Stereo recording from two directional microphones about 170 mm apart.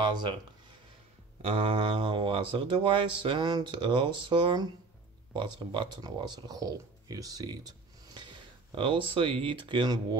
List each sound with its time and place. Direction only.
0.1 s speech: 25° right (ahead or behind)
1.4 s speech: 30° right (ahead or behind)